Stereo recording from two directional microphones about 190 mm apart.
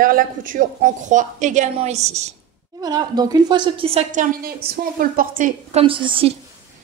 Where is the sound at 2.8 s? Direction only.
20° right (ahead or behind).